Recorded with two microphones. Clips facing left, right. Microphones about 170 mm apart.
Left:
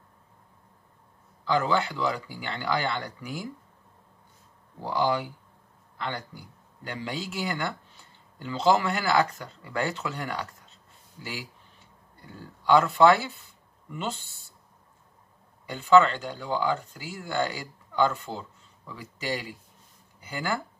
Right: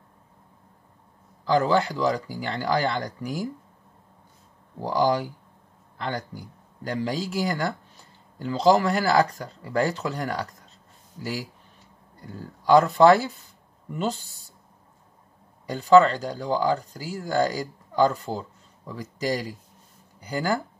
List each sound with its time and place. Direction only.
1.4 s speech: 35° right (ahead or behind)
4.7 s speech: 40° right (ahead or behind)
12.3 s speech: 40° right (ahead or behind)
15.6 s speech: 35° right (ahead or behind)